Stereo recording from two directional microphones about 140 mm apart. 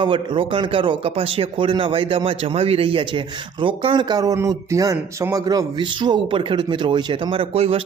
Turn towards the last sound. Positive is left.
turn(degrees=-45)  # may be behind; listen again after turning